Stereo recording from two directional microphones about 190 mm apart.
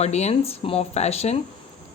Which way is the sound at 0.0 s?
35° left (ahead or behind).